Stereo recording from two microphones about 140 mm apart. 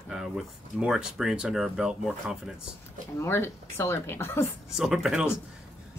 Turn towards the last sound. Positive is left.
turn(degrees=-5)  # may be behind; listen again after turning